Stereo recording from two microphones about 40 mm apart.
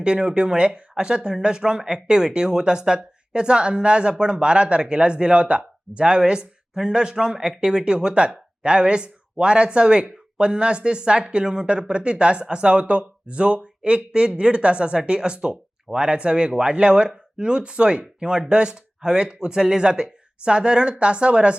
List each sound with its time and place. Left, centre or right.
0.0 s speech: right